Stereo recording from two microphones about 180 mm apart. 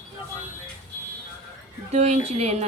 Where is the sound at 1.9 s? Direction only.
35° right (ahead or behind).